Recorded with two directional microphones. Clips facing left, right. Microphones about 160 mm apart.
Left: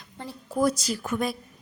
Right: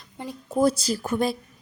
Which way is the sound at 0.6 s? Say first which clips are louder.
Right 3 dB; 30° right (ahead or behind).